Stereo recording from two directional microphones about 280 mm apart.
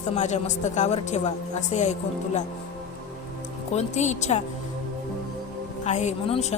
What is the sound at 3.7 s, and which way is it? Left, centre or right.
Speech, left.